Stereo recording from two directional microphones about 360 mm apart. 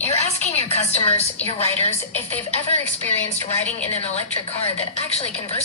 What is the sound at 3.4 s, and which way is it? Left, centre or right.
Speech, centre.